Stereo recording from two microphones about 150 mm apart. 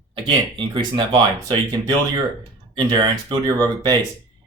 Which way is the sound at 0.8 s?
30° right (ahead or behind).